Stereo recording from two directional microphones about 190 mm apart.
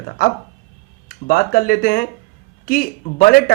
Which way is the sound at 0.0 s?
50° left (ahead or behind).